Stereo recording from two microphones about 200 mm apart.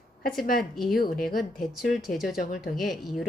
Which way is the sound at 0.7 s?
Centre (ahead or behind).